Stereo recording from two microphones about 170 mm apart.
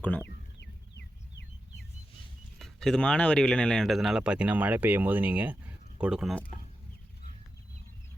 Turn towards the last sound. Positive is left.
turn(degrees=-5)  # may be behind; listen again after turning